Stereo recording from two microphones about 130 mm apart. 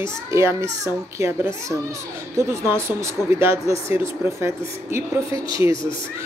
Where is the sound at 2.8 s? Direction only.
20° right (ahead or behind).